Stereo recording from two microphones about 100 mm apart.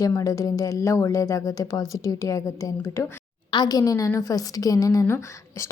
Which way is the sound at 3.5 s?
40° left (ahead or behind).